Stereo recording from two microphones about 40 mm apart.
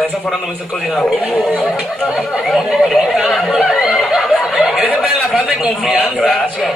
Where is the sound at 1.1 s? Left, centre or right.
Left.